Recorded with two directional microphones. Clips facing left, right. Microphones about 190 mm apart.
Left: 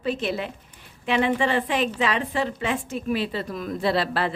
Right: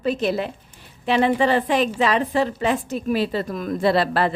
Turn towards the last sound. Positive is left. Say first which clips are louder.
# right 4 dB
turn(degrees=-45)  # may be behind; listen again after turning